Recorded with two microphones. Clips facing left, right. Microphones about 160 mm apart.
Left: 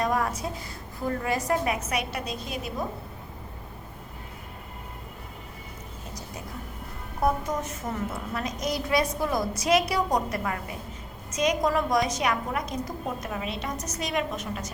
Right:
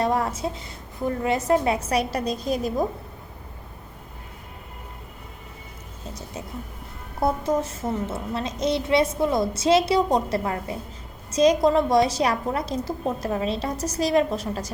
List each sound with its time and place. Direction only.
0.0 s a woman's voice: 30° right (ahead or behind)
7.2 s a child's voice: 30° right (ahead or behind)